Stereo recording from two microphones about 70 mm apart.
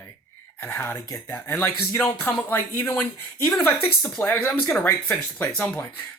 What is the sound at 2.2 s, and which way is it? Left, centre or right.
Speech, left.